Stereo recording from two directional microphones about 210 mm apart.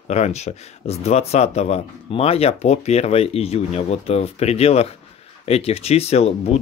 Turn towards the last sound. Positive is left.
turn(degrees=30)  # may be behind; listen again after turning